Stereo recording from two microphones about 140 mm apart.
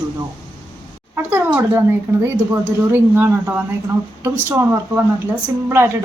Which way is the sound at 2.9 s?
15° right (ahead or behind).